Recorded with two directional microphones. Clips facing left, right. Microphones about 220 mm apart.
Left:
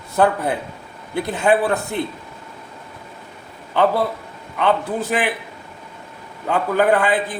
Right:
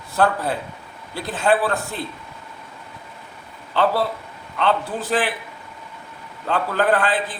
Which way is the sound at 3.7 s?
15° left (ahead or behind).